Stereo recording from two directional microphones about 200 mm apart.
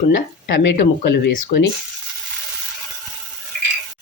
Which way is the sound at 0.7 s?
60° left (ahead or behind).